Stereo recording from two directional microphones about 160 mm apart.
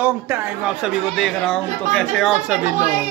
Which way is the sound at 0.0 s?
10° right (ahead or behind).